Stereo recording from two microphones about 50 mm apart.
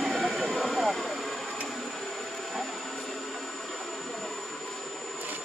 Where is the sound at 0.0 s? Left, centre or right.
Centre.